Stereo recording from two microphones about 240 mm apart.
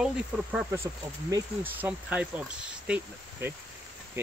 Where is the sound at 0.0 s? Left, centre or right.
Centre.